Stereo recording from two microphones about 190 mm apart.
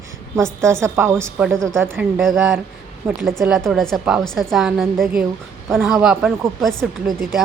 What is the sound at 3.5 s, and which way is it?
Speech, centre (ahead or behind).